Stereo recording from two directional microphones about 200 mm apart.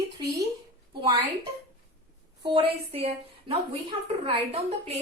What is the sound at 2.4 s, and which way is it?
A woman's voice, 25° right (ahead or behind).